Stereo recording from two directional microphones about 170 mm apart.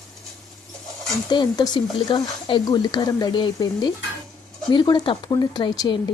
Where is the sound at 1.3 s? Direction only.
25° left (ahead or behind).